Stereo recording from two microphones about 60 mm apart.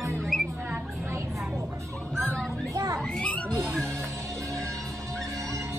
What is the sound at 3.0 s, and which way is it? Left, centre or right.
Children playing, centre.